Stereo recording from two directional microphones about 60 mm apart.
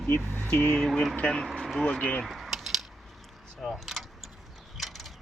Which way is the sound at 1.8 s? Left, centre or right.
Centre.